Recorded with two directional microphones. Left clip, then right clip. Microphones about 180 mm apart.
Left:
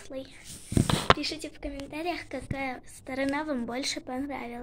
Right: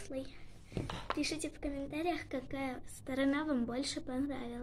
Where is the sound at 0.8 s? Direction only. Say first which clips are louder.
Left 17 dB; 50° left (ahead or behind).